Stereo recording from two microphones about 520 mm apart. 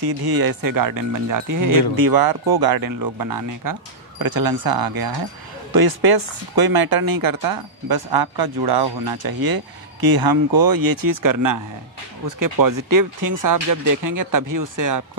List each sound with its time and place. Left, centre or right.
0.2 s speech: right